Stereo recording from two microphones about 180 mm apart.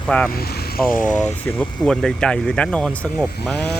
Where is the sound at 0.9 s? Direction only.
45° left (ahead or behind).